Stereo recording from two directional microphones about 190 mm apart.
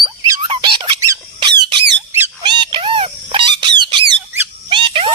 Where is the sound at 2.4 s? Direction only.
25° right (ahead or behind).